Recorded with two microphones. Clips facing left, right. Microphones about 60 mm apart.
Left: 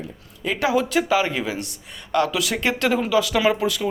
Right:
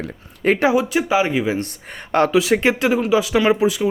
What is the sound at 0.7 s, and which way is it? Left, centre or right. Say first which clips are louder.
Speech: right 2 dB; centre.